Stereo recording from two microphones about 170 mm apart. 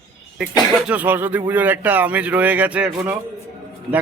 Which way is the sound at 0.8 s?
10° right (ahead or behind).